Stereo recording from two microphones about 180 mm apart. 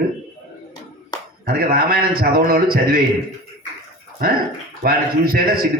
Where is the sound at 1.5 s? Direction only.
55° right (ahead or behind).